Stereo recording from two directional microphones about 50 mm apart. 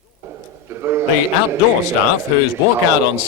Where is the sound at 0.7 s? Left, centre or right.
Right.